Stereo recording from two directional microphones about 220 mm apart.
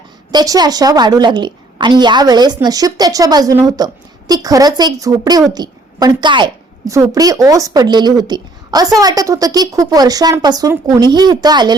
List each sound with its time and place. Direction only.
0.3 s a woman's voice: 20° right (ahead or behind)